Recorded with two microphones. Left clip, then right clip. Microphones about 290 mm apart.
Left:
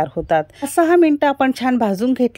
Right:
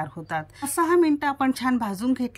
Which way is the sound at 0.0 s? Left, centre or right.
Centre.